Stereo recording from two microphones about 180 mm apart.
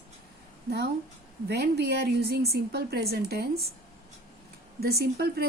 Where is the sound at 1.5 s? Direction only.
65° right (ahead or behind).